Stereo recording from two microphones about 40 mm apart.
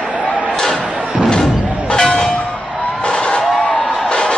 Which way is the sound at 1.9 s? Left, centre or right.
Centre.